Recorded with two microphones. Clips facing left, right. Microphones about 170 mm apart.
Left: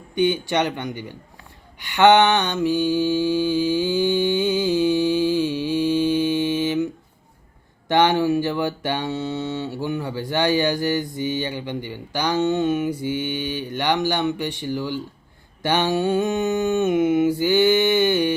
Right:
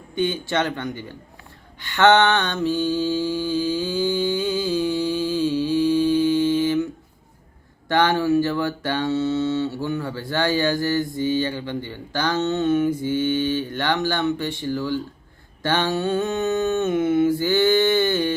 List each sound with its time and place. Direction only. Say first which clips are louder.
0.2 s speech: left 3 dB; 15° left (ahead or behind)
1.8 s mantra: left 2 dB; 15° left (ahead or behind)
7.9 s speech: left 1 dB; 15° left (ahead or behind)